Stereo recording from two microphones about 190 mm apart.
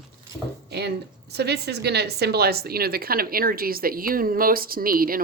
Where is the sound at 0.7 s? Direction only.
60° right (ahead or behind).